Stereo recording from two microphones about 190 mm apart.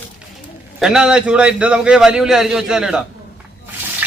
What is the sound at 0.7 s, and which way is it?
A man's voice, 5° right (ahead or behind).